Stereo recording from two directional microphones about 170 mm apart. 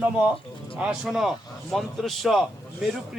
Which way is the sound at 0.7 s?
5° right (ahead or behind).